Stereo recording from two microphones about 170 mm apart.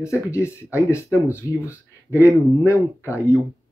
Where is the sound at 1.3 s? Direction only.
15° left (ahead or behind).